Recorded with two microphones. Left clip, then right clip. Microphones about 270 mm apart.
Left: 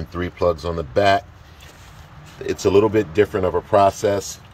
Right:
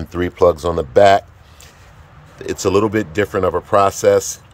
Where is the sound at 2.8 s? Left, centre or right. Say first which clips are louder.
Left 1 dB; centre.